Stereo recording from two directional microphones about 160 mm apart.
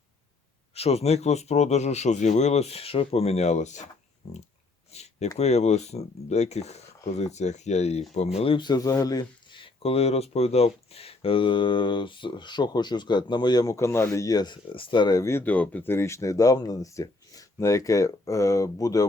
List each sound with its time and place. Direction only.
0.7 s speech: 40° left (ahead or behind)
4.9 s a sound: 40° left (ahead or behind)
5.4 s speech: 45° left (ahead or behind)
8.4 s speech: 30° left (ahead or behind)